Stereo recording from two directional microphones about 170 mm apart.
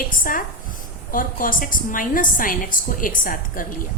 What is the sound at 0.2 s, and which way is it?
A woman's voice, 55° left (ahead or behind).